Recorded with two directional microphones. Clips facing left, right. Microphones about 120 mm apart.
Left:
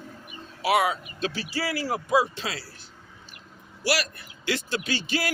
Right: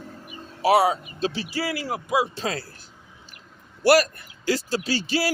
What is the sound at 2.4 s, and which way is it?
Speech, 45° right (ahead or behind).